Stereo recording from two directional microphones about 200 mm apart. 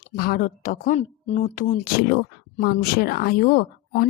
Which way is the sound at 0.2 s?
45° left (ahead or behind).